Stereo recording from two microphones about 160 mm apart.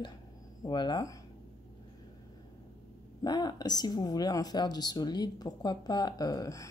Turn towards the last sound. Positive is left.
turn(degrees=20)  # may be behind; listen again after turning